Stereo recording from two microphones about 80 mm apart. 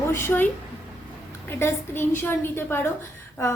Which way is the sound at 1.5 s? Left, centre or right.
Left.